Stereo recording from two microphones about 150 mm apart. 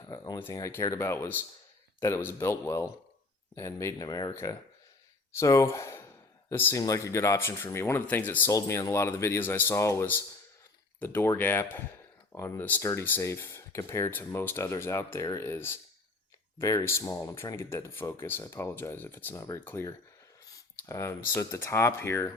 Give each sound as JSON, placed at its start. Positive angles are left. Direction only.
{"t": 0.3, "sound": "speech", "side_deg": 15}